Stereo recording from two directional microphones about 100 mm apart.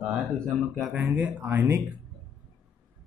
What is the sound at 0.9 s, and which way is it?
Speech, 15° right (ahead or behind).